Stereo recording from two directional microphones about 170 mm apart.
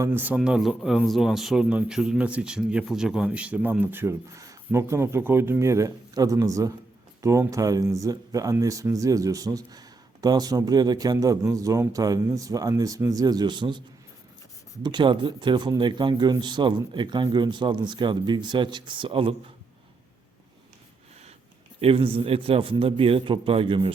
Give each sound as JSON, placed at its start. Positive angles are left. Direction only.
{"t": 0.0, "sound": "speech", "side_deg": -10}
{"t": 14.8, "sound": "speech", "side_deg": -25}
{"t": 21.8, "sound": "a man's voice", "side_deg": -35}